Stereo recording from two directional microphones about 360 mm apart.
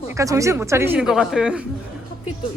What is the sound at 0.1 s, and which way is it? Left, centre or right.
Speech, centre.